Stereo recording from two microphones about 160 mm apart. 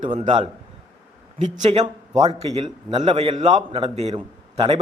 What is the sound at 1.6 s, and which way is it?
A man's voice, 40° right (ahead or behind).